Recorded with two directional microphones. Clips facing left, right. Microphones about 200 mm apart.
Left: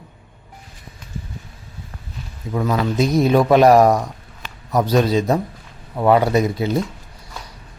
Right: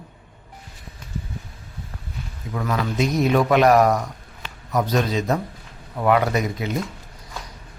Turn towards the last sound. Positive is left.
turn(degrees=30)  # may be behind; listen again after turning